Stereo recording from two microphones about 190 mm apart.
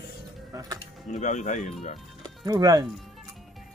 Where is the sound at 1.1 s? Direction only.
40° left (ahead or behind).